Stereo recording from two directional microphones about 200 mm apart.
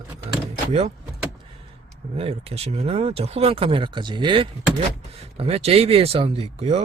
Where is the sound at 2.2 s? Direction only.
30° right (ahead or behind).